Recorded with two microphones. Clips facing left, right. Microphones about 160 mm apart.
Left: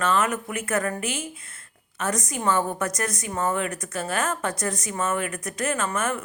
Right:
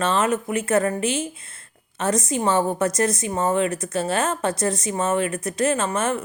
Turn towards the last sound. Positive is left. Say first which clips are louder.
# right 4 dB
turn(degrees=-25)  # may be behind; listen again after turning